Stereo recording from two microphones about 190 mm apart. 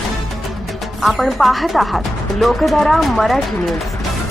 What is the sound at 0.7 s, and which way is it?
Speech, centre (ahead or behind).